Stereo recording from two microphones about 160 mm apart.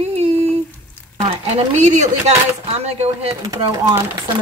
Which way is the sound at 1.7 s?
50° right (ahead or behind).